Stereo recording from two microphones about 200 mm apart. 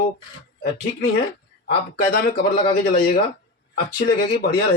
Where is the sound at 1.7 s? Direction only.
50° left (ahead or behind).